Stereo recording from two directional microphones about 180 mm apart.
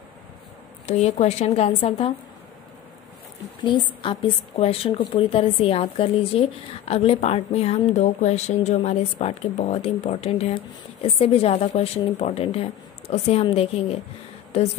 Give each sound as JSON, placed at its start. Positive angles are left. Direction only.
{"t": 0.8, "sound": "a woman's voice", "side_deg": 35}
{"t": 3.6, "sound": "a woman's voice", "side_deg": 25}